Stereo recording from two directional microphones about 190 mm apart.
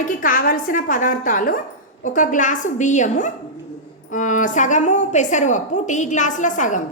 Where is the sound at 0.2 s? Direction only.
45° left (ahead or behind).